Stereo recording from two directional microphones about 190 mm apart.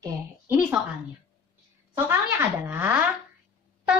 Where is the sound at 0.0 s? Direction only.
15° right (ahead or behind).